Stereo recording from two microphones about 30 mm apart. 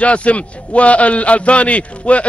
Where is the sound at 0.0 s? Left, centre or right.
Left.